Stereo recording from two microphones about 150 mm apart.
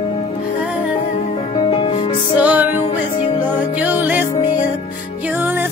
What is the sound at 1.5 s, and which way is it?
Music, 30° left (ahead or behind).